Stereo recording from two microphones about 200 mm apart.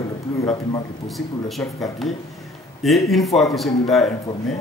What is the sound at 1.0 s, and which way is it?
A man's voice, centre (ahead or behind).